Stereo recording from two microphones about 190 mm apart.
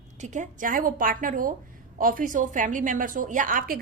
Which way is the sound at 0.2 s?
40° right (ahead or behind).